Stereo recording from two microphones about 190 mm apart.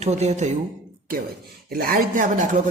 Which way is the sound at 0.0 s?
35° right (ahead or behind).